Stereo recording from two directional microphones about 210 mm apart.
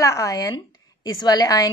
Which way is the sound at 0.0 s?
15° left (ahead or behind).